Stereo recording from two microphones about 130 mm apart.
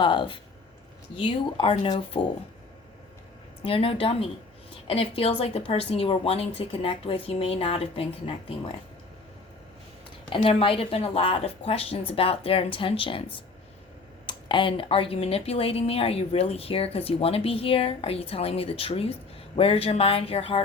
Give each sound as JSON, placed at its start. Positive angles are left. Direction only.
{"t": 0.0, "sound": "speech", "side_deg": 40}
{"t": 3.6, "sound": "speech", "side_deg": 45}
{"t": 10.2, "sound": "speech", "side_deg": 45}
{"t": 14.3, "sound": "speech", "side_deg": 40}